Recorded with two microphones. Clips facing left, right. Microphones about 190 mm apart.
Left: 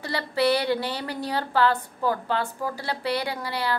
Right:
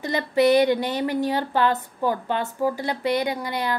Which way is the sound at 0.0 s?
20° right (ahead or behind).